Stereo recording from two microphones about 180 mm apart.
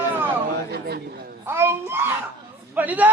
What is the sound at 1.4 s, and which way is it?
A child's voice, 15° right (ahead or behind).